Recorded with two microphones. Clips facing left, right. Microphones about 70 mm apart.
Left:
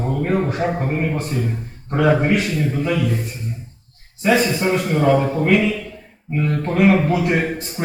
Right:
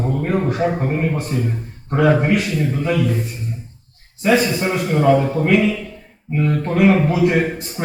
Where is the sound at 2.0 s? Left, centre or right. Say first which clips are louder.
Right 1 dB; centre.